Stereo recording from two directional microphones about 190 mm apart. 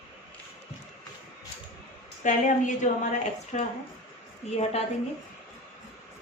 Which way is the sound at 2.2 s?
40° left (ahead or behind).